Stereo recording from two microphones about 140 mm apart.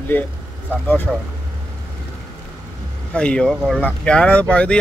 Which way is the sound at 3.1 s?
5° left (ahead or behind).